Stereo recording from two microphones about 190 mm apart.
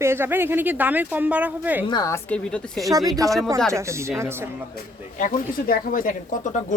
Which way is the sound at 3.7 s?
15° right (ahead or behind).